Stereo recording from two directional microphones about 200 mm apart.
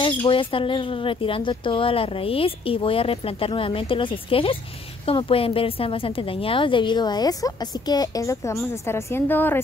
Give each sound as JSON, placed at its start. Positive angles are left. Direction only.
{"t": 0.3, "sound": "a woman's voice", "side_deg": 25}